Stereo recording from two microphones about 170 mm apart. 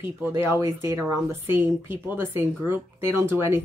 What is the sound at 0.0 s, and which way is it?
Speech, 15° right (ahead or behind).